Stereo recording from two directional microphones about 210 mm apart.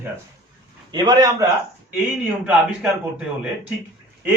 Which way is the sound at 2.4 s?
5° right (ahead or behind).